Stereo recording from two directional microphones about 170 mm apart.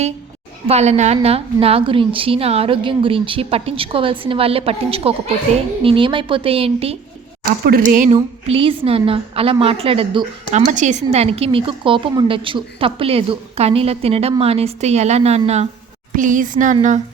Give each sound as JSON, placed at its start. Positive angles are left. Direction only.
{"t": 0.7, "sound": "a woman's voice", "side_deg": -40}
{"t": 7.6, "sound": "a woman's voice", "side_deg": -60}
{"t": 10.7, "sound": "a woman's voice", "side_deg": -45}
{"t": 16.1, "sound": "a woman's voice", "side_deg": -50}